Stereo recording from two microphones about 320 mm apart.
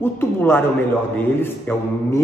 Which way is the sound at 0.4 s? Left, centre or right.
Centre.